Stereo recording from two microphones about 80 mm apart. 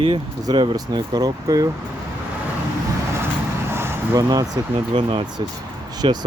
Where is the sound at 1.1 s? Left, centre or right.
Right.